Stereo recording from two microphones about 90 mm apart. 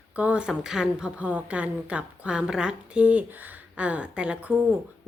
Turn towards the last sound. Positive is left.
turn(degrees=-15)  # may be behind; listen again after turning